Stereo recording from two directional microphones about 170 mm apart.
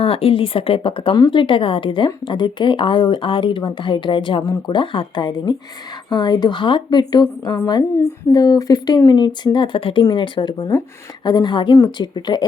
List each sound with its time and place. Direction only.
0.0 s speech: 35° left (ahead or behind)